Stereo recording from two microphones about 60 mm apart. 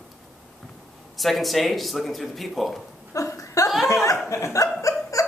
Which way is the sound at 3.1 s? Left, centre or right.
Left.